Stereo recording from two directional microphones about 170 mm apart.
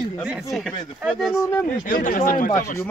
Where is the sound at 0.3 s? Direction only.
Centre (ahead or behind).